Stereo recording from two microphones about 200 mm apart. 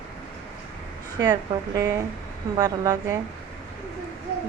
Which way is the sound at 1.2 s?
20° right (ahead or behind).